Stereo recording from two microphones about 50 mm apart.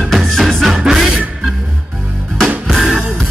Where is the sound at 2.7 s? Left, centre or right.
Centre.